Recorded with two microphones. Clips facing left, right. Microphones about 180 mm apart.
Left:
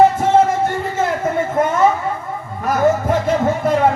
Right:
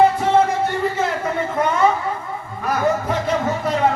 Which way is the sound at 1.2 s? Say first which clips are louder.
Left 3 dB; 45° left (ahead or behind).